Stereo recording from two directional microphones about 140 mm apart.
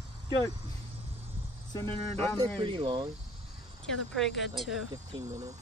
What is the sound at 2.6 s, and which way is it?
Speech, 35° right (ahead or behind).